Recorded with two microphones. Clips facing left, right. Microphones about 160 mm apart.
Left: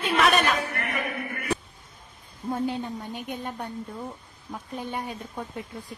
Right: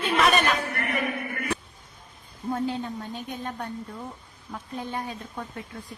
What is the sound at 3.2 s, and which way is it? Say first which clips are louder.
Speech: even; 15° left (ahead or behind).